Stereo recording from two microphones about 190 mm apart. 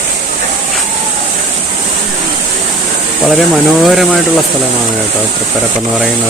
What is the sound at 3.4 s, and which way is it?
Speech, centre (ahead or behind).